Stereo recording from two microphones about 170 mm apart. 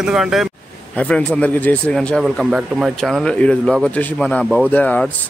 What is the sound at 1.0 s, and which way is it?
Speech, 5° left (ahead or behind).